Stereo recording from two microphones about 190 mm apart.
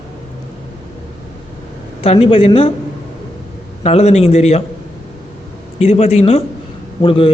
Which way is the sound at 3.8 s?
35° left (ahead or behind).